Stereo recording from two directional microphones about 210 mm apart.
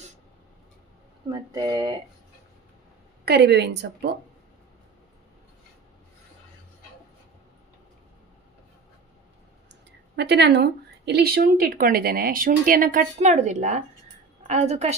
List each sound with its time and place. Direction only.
1.3 s speech: 20° right (ahead or behind)
3.3 s speech: 55° right (ahead or behind)
10.1 s a woman's voice: 55° right (ahead or behind); by 15.0 s 30° right (ahead or behind)